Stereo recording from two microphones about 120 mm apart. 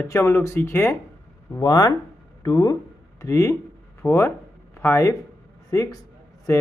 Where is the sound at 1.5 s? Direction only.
30° left (ahead or behind).